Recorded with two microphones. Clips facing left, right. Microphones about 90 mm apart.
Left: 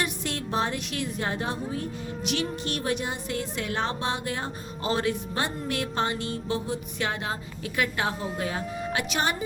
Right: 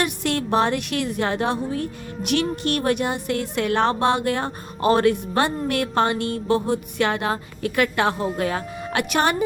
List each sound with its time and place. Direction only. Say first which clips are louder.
0.0 s a woman's voice: right 7 dB; 65° right (ahead or behind)